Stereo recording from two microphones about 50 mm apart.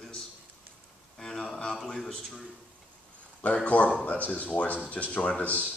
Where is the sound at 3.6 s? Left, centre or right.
Left.